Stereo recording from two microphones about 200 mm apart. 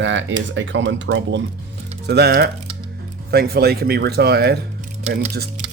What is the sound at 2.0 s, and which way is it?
Speech, 55° right (ahead or behind).